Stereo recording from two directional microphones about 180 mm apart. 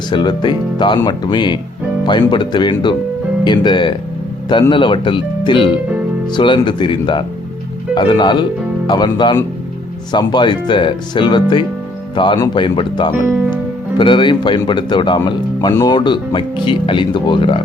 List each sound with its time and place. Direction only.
0.1 s speech: 25° left (ahead or behind)
13.2 s speech: 10° right (ahead or behind)
14.0 s speech: 25° left (ahead or behind)